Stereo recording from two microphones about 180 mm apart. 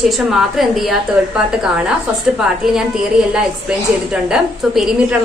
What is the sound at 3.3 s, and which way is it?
A woman's voice, 5° right (ahead or behind).